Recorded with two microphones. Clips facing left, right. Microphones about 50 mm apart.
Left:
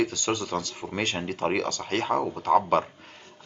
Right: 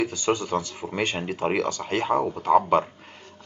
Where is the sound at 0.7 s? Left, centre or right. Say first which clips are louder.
Right 2 dB; centre.